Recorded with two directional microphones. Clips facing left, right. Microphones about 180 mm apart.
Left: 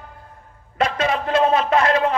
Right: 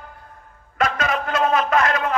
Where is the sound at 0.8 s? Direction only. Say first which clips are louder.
Left 2 dB; 30° left (ahead or behind).